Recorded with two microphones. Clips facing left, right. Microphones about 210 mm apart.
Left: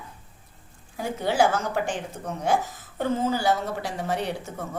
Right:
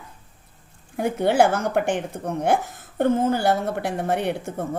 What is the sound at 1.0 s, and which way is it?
Speech, 60° right (ahead or behind).